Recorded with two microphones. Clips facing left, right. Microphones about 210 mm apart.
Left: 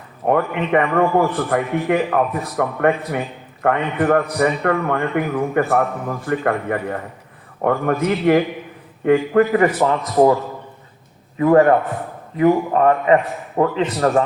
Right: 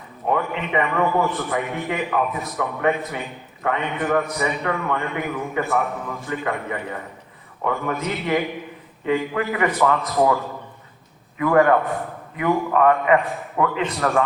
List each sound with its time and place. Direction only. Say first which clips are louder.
0.3 s a man's voice: left 6 dB; 55° left (ahead or behind)
2.0 s a man's voice: left 5 dB; 45° left (ahead or behind)
2.6 s a man's voice: left 4 dB; 55° left (ahead or behind); by 9.6 s 40° left (ahead or behind)
9.7 s a man's voice: left 2 dB; 30° left (ahead or behind)
11.3 s a man's voice: left 4 dB; 35° left (ahead or behind)